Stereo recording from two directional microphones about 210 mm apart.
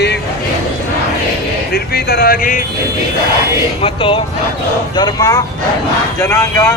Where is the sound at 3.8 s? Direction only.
25° left (ahead or behind).